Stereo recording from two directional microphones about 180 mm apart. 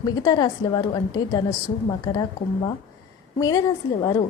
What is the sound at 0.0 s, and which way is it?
A woman's voice, 20° left (ahead or behind).